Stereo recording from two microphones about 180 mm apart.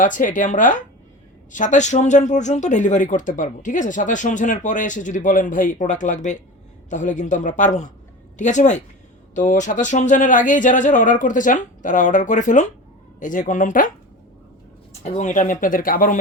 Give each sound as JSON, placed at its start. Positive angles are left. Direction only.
{"t": 0.0, "sound": "speech", "side_deg": 45}
{"t": 15.0, "sound": "speech", "side_deg": 40}